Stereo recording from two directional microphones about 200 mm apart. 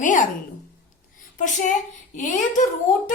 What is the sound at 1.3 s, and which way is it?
A woman's voice, 40° left (ahead or behind).